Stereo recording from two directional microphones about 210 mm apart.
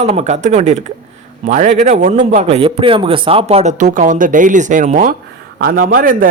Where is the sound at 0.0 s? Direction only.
30° right (ahead or behind).